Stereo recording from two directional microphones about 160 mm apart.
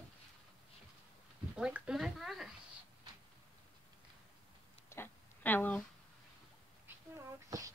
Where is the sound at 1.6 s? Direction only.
5° right (ahead or behind).